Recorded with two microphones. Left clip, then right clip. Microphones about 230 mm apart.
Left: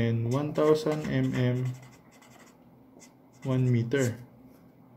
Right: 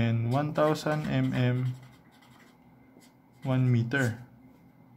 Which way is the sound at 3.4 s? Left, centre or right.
Right.